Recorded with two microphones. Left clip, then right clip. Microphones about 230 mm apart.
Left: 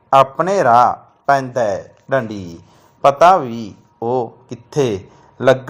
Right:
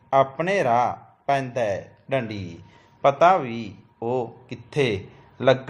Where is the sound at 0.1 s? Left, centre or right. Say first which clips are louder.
Left 8 dB; left.